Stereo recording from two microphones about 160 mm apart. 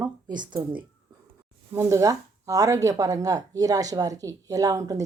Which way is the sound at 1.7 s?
15° right (ahead or behind).